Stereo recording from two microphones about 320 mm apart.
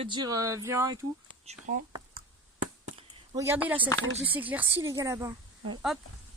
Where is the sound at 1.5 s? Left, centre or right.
Right.